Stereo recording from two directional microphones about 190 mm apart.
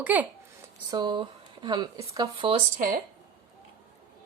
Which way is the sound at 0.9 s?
20° right (ahead or behind).